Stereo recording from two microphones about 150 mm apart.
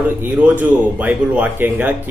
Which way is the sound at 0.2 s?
10° right (ahead or behind).